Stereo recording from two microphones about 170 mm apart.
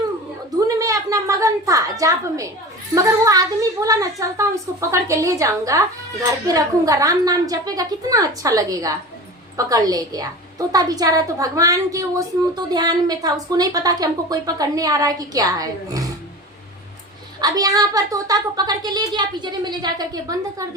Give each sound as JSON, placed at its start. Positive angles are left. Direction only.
{"t": 0.5, "sound": "a woman's voice", "side_deg": -20}
{"t": 17.4, "sound": "a woman's voice", "side_deg": -20}